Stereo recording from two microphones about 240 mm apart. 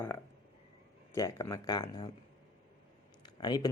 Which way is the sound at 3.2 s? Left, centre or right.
Centre.